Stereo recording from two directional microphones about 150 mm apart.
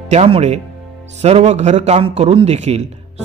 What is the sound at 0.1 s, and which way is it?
A man's voice, 45° right (ahead or behind).